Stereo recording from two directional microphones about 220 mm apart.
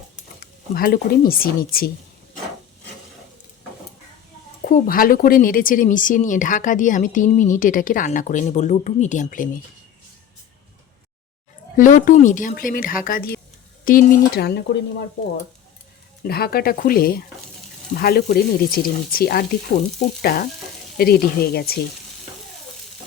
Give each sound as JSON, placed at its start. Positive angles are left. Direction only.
{"t": 0.3, "sound": "speech", "side_deg": 40}
{"t": 4.6, "sound": "speech", "side_deg": 40}
{"t": 11.8, "sound": "speech", "side_deg": 35}
{"t": 16.2, "sound": "speech", "side_deg": 45}